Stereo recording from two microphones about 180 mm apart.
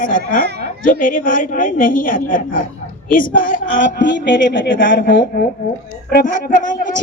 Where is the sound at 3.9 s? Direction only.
80° left.